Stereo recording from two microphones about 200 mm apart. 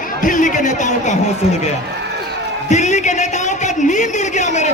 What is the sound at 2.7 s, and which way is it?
Speech, 35° left (ahead or behind).